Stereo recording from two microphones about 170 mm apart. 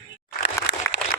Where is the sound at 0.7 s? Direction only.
75° left (ahead or behind).